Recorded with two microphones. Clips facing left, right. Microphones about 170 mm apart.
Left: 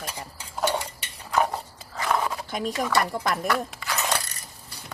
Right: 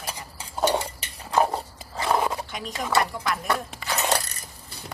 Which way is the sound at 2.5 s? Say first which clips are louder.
Left 2 dB; 40° left (ahead or behind).